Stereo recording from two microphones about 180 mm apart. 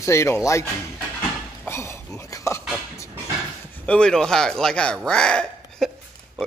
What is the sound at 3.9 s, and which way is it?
Speech, 5° left (ahead or behind).